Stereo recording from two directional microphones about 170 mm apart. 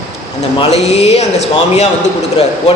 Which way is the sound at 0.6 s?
40° left (ahead or behind).